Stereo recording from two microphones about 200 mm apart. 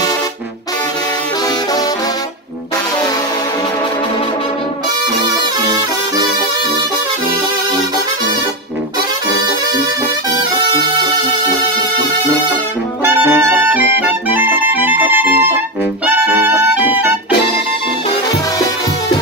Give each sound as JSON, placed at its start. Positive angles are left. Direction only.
{"t": 13.0, "sound": "music", "side_deg": -10}